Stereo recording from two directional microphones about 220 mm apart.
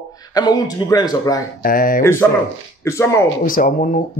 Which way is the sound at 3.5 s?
40° left (ahead or behind).